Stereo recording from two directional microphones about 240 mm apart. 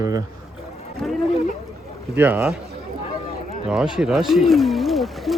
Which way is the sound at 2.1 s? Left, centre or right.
Centre.